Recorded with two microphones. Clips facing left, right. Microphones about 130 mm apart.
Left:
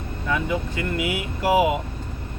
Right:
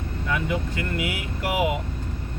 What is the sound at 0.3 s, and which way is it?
Speech, 25° left (ahead or behind).